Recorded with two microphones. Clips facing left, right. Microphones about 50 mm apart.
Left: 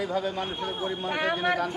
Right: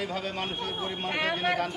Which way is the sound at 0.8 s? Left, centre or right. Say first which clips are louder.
Left 2 dB; right.